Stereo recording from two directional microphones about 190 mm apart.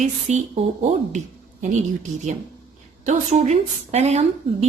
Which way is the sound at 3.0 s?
40° right (ahead or behind).